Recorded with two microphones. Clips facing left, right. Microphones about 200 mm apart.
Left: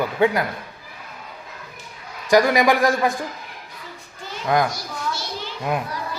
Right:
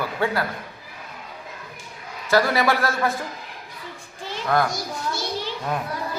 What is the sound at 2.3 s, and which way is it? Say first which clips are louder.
Speech: left 4 dB; 15° left (ahead or behind).